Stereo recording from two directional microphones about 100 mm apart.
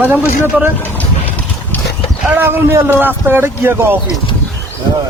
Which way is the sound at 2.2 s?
20° right (ahead or behind).